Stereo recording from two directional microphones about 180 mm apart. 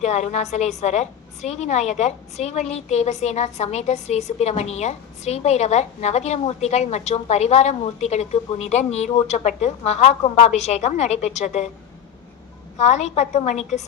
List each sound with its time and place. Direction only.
0.0 s a woman's voice: 40° left (ahead or behind)
12.7 s a woman's voice: 40° left (ahead or behind)